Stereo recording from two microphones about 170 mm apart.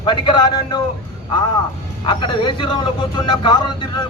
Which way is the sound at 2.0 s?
30° left (ahead or behind).